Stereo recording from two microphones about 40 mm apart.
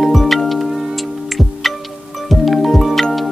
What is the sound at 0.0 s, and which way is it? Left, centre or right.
Music, centre.